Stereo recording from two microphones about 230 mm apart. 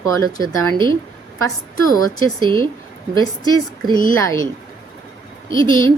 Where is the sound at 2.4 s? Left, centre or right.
Right.